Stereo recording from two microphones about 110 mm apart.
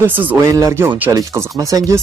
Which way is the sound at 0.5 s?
30° right (ahead or behind).